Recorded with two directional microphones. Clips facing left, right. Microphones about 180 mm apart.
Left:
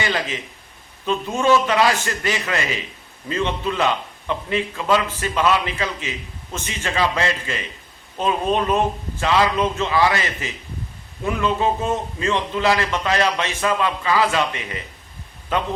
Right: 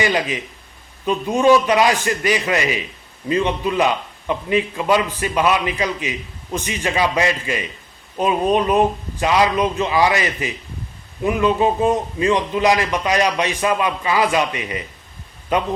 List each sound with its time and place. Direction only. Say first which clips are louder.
0.0 s a man's voice: right 4 dB; 15° right (ahead or behind)